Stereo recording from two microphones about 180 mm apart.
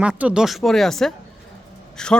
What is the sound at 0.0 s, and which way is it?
Speech, 5° right (ahead or behind).